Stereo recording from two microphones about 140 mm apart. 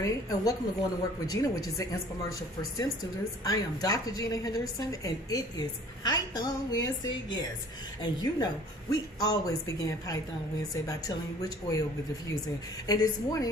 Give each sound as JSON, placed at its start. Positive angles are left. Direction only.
{"t": 0.0, "sound": "a woman's voice", "side_deg": 25}
{"t": 12.9, "sound": "a woman's voice", "side_deg": 25}